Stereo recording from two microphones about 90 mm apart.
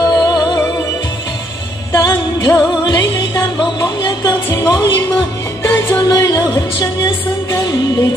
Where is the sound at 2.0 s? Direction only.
45° left (ahead or behind).